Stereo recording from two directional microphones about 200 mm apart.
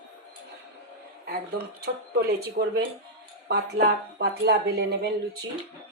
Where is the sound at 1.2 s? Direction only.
50° right (ahead or behind).